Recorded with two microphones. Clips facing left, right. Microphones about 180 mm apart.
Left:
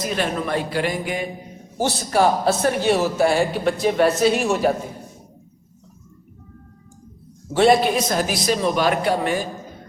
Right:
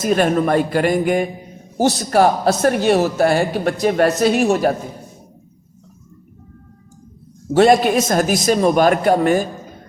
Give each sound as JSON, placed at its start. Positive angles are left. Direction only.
{"t": 0.0, "sound": "a man's voice", "side_deg": -50}
{"t": 7.5, "sound": "a man's voice", "side_deg": -45}